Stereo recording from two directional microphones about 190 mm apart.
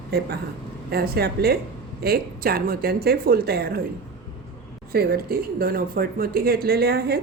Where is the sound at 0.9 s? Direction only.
55° right (ahead or behind).